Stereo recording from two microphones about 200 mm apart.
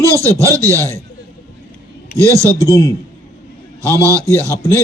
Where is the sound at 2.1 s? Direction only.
15° right (ahead or behind).